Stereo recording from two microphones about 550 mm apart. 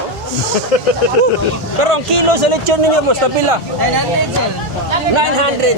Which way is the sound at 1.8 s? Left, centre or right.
Right.